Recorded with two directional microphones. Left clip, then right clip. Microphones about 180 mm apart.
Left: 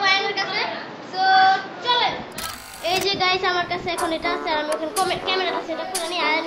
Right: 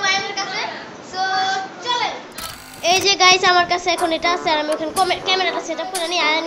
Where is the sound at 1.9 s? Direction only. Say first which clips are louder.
Left 2 dB; 5° right (ahead or behind).